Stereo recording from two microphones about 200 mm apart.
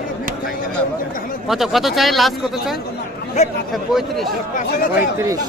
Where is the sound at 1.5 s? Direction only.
Centre (ahead or behind).